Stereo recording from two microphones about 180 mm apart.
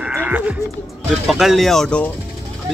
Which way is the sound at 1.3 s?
Centre (ahead or behind).